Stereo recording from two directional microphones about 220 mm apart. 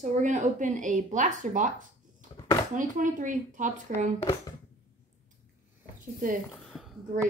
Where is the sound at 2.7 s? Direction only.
35° right (ahead or behind).